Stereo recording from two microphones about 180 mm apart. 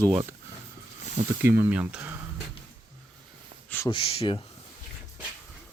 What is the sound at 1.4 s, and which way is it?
Speech, 10° right (ahead or behind).